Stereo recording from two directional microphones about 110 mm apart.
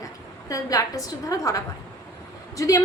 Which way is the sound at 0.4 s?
30° left (ahead or behind).